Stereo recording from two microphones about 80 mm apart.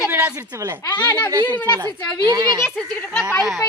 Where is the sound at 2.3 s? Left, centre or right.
Right.